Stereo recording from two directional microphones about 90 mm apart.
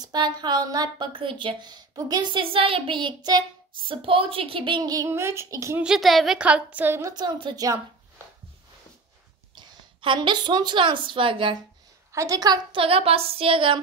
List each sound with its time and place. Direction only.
0.0 s a woman's voice: 50° right (ahead or behind)
2.4 s child singing: 90° right; by 3.4 s 50° right (ahead or behind)
3.8 s a woman's voice: 80° right
4.8 s speech: 45° right (ahead or behind)
5.1 s speech: 30° right (ahead or behind)
5.9 s a woman's voice: centre (ahead or behind)
6.4 s a woman's voice: 15° right (ahead or behind)
7.2 s a woman's voice: 55° right (ahead or behind)
7.5 s speech: 40° right (ahead or behind)
9.6 s a woman's voice: 60° right (ahead or behind)
12.1 s a woman's voice: 40° right (ahead or behind)
12.7 s a woman's voice: 90° right